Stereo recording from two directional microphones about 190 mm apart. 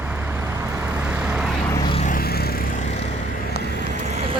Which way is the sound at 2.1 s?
50° left (ahead or behind).